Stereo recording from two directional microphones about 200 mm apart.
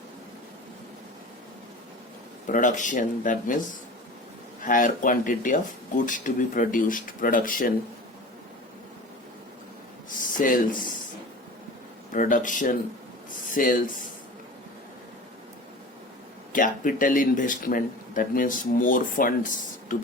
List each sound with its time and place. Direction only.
2.5 s speech: 40° left (ahead or behind)
4.6 s speech: 40° left (ahead or behind)
10.2 s a sound: 40° left (ahead or behind)
12.1 s speech: 40° left (ahead or behind)
16.5 s speech: 40° left (ahead or behind)